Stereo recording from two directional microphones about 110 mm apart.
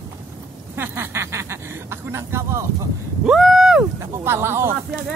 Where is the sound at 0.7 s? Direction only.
20° right (ahead or behind).